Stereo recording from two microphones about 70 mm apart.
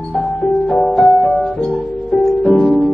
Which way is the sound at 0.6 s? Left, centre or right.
Centre.